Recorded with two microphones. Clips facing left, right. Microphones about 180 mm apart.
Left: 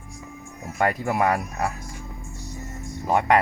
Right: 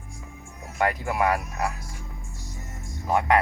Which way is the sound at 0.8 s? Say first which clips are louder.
Left 2 dB; 40° left (ahead or behind).